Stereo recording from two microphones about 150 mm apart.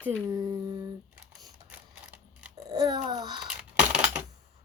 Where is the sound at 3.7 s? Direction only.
10° right (ahead or behind).